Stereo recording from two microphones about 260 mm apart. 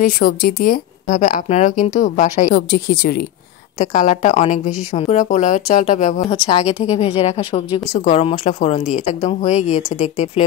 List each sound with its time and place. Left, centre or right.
0.0 s a woman's voice: left